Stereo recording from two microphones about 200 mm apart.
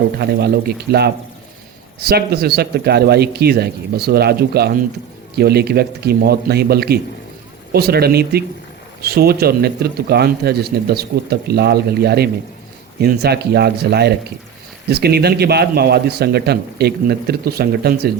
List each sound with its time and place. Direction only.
0.2 s a man's voice: 55° right (ahead or behind)